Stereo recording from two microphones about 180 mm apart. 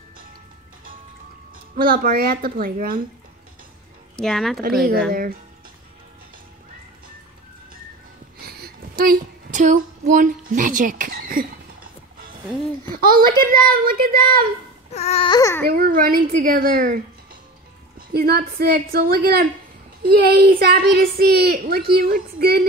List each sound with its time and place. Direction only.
1.8 s a woman's voice: 55° right (ahead or behind)
4.2 s speech: centre (ahead or behind)
8.4 s a sound: 60° right (ahead or behind)
12.8 s a sound: 50° right (ahead or behind)
13.4 s a woman's voice: 55° right (ahead or behind)
15.0 s baby cry: 35° left (ahead or behind)
15.6 s a woman's voice: 55° right (ahead or behind)